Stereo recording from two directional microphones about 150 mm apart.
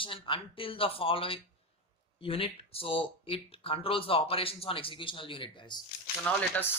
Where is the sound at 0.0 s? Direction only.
35° left (ahead or behind).